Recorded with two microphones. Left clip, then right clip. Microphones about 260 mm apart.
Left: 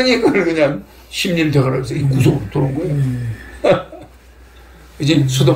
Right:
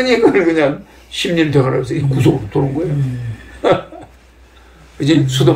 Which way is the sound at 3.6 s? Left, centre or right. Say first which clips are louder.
Even; centre.